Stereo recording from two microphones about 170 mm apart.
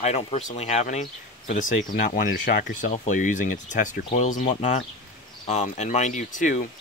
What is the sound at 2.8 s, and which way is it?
Speech, 45° left (ahead or behind).